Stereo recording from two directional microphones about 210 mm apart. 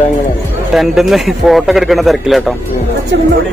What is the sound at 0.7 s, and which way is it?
A man's voice, centre (ahead or behind).